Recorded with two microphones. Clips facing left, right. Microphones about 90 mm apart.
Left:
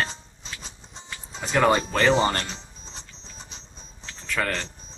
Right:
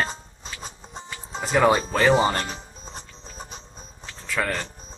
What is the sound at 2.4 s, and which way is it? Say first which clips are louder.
Music: right 4 dB; 50° right (ahead or behind).